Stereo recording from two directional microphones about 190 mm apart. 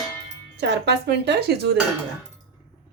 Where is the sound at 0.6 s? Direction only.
65° right (ahead or behind).